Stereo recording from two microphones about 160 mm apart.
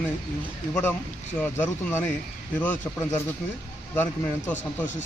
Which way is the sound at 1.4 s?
15° left (ahead or behind).